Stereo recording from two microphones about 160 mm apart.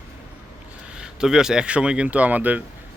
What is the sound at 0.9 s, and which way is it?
Speech, 5° right (ahead or behind).